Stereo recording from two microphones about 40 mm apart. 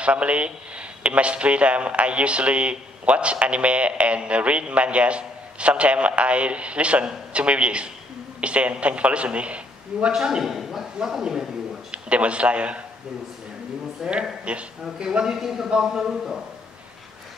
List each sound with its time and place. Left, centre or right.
0.0 s a man's voice: right
10.1 s a man's voice: centre
10.4 s a man's voice: centre
11.9 s a man's voice: right
14.0 s a man's voice: centre
14.4 s a man's voice: right
15.3 s a man's voice: centre